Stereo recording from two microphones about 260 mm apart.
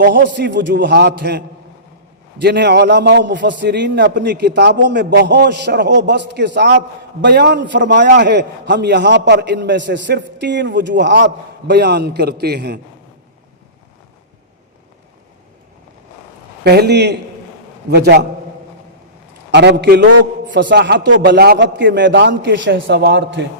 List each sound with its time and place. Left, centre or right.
0.0 s a man's voice: right
16.6 s a man's voice: right
19.5 s a man's voice: right